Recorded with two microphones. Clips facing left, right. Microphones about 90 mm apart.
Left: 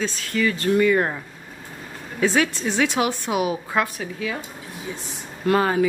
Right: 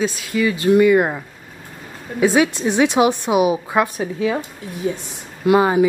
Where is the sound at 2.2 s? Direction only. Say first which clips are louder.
Right 5 dB; 15° right (ahead or behind).